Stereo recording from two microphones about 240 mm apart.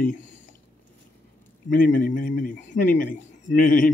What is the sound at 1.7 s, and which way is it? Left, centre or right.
A man's voice, left.